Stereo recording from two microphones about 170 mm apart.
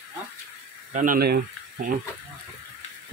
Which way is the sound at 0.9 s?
50° right (ahead or behind).